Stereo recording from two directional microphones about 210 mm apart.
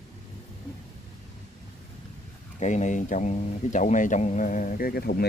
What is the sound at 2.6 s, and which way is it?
Speech, 35° left (ahead or behind).